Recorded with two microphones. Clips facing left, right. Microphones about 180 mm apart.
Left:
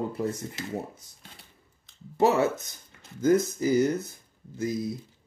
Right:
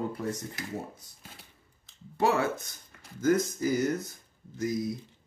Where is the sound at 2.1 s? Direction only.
25° left (ahead or behind).